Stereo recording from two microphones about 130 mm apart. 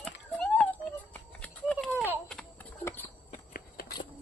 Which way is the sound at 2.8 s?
20° left (ahead or behind).